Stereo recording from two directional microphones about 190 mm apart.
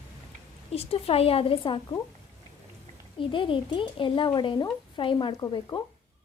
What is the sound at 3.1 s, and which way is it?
Speech, 25° left (ahead or behind).